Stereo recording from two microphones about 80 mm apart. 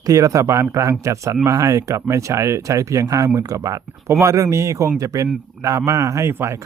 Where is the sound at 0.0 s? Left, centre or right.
Right.